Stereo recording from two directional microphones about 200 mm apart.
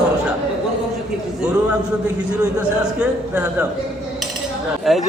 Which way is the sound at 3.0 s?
10° right (ahead or behind).